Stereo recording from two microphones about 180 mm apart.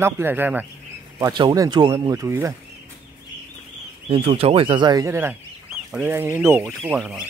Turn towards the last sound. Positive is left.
turn(degrees=-5)  # may be behind; listen again after turning